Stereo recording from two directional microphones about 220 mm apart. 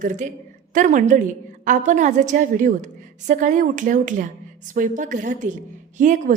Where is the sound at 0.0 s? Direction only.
35° right (ahead or behind).